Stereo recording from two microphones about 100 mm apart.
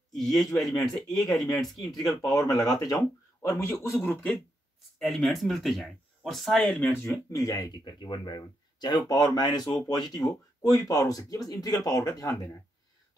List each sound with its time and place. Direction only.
0.3 s speech: 35° left (ahead or behind)
0.6 s speech: centre (ahead or behind)
2.2 s speech: 35° left (ahead or behind); by 4.3 s 20° left (ahead or behind)
4.9 s speech: 5° left (ahead or behind)
6.8 s speech: 25° left (ahead or behind)
7.1 s speech: 35° left (ahead or behind)